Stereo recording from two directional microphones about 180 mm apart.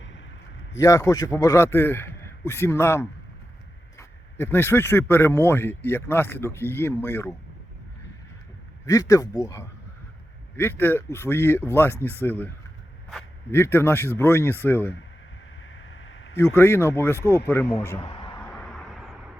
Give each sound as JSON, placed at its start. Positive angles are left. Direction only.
{"t": 0.8, "sound": "speech", "side_deg": 20}
{"t": 8.9, "sound": "speech", "side_deg": 20}
{"t": 13.5, "sound": "speech", "side_deg": 10}
{"t": 15.9, "sound": "a sound", "side_deg": 90}
{"t": 16.4, "sound": "speech", "side_deg": 15}
{"t": 18.0, "sound": "a sound", "side_deg": 25}
{"t": 18.5, "sound": "vehicle", "side_deg": 0}